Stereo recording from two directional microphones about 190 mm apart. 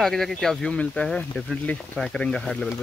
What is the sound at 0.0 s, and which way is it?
Speech, centre (ahead or behind).